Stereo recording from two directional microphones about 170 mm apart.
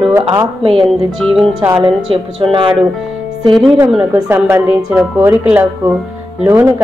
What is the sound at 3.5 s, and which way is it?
Speech, centre (ahead or behind).